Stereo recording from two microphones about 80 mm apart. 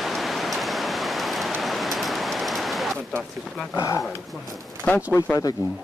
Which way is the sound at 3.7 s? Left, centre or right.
Left.